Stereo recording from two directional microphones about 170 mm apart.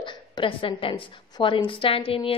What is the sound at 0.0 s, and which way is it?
A woman's voice, 30° left (ahead or behind).